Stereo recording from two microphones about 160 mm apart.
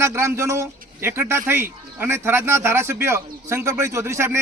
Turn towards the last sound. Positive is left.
turn(degrees=-15)  # may be behind; listen again after turning